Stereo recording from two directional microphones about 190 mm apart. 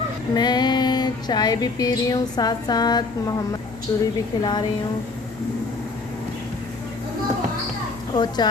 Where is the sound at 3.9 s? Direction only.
15° left (ahead or behind).